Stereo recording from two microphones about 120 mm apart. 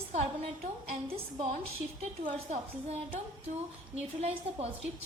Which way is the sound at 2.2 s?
65° right (ahead or behind).